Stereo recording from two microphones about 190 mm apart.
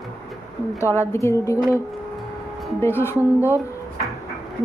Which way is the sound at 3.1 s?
10° right (ahead or behind).